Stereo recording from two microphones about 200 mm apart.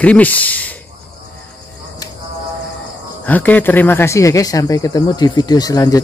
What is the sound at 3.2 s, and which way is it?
Speech, 10° left (ahead or behind).